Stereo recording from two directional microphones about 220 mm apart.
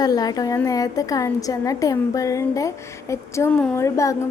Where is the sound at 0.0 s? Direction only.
15° left (ahead or behind).